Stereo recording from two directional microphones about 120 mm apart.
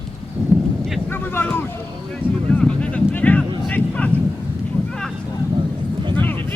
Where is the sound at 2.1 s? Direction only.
10° left (ahead or behind).